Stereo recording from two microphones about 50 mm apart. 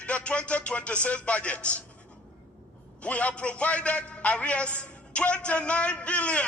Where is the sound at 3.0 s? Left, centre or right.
Left.